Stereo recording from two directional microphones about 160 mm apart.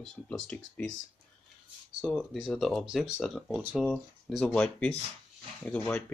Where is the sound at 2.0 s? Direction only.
Centre (ahead or behind).